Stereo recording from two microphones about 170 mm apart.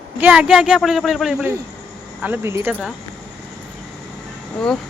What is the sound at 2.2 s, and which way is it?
Speech, 15° right (ahead or behind).